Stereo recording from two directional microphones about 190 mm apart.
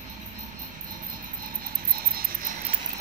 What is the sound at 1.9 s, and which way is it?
Insect, 50° right (ahead or behind).